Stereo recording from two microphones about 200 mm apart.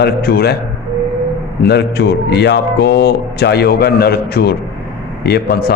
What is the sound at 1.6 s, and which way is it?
A man's voice, 55° left (ahead or behind).